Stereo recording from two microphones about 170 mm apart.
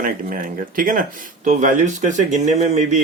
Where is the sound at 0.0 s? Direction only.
55° right (ahead or behind).